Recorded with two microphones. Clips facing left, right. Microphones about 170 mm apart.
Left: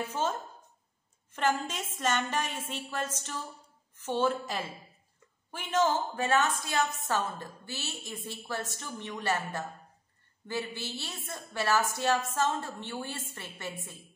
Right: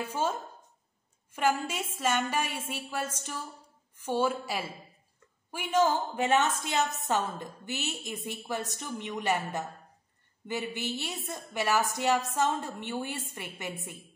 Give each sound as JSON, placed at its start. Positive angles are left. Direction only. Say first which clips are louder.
{"t": 0.1, "sound": "a woman's voice", "louder": "right 1 dB", "side_deg": -10}